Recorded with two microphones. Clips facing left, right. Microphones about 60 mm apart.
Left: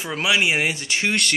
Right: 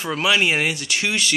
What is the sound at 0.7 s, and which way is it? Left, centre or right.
Speech, left.